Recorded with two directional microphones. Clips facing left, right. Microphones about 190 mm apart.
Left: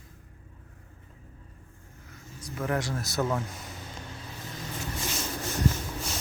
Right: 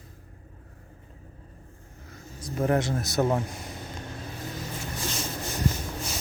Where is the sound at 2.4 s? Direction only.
35° right (ahead or behind).